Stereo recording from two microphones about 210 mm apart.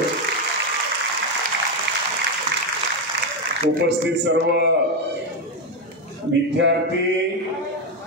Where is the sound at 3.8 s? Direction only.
55° right (ahead or behind).